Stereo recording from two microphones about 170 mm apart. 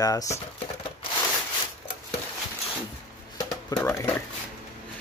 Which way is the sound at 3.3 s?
20° left (ahead or behind).